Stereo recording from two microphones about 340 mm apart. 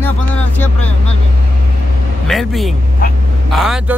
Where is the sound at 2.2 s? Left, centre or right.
Centre.